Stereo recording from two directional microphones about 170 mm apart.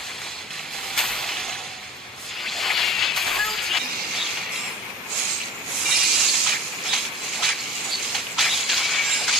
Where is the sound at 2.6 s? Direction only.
Centre (ahead or behind).